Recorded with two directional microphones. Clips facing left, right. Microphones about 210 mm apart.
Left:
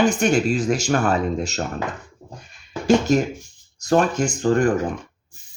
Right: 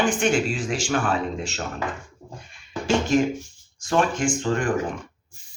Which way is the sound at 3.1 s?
40° left (ahead or behind).